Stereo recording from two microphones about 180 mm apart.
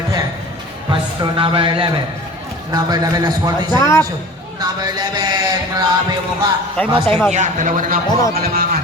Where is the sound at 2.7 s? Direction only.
20° right (ahead or behind).